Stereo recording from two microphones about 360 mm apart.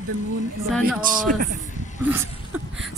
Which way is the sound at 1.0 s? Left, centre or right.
Right.